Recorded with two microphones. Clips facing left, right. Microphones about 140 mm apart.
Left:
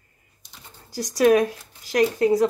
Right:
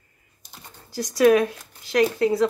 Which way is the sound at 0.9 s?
40° left (ahead or behind).